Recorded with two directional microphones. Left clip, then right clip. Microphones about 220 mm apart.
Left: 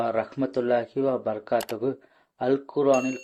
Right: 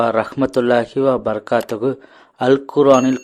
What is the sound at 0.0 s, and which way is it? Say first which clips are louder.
A man's voice: right 9 dB; 30° right (ahead or behind).